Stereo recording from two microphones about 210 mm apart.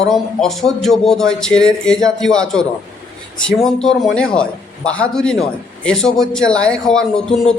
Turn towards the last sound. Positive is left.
turn(degrees=5)  # may be behind; listen again after turning